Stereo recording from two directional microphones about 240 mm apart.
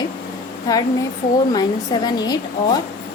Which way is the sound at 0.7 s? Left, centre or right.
Centre.